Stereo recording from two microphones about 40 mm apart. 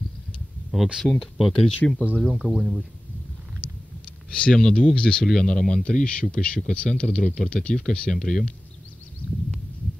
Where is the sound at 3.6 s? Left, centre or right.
Left.